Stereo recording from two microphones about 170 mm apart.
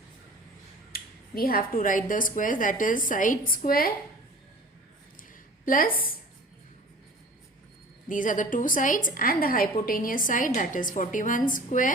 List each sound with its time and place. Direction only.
0.9 s a woman's voice: 60° left (ahead or behind)
5.6 s a woman's voice: 55° left (ahead or behind)
8.0 s a woman's voice: 50° left (ahead or behind)